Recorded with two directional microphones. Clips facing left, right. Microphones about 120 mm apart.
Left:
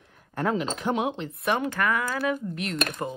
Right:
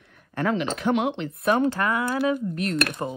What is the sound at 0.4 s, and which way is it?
Speech, 75° right (ahead or behind).